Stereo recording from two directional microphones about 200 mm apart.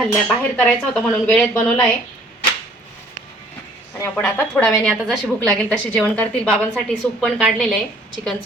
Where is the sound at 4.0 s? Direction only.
5° left (ahead or behind).